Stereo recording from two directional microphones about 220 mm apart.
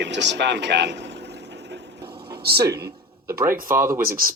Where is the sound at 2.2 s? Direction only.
45° right (ahead or behind).